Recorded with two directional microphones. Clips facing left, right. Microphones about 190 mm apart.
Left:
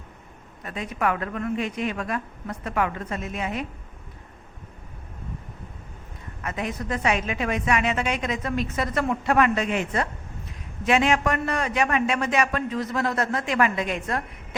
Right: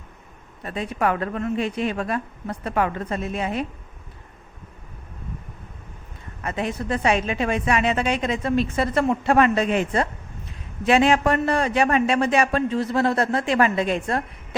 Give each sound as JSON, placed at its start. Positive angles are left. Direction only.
{"t": 0.6, "sound": "a woman's voice", "side_deg": -30}
{"t": 6.4, "sound": "a woman's voice", "side_deg": -30}